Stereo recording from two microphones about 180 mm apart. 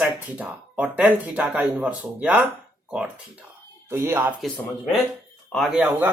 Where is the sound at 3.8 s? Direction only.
10° right (ahead or behind).